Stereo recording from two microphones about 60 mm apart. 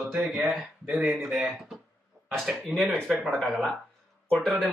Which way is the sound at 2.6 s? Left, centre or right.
Centre.